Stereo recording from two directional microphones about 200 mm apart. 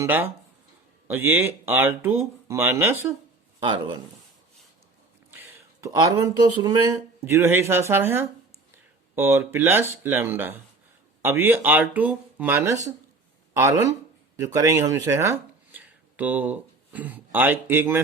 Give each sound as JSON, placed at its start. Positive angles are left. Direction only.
{"t": 0.0, "sound": "speech", "side_deg": -10}
{"t": 3.6, "sound": "speech", "side_deg": -25}
{"t": 5.3, "sound": "speech", "side_deg": -10}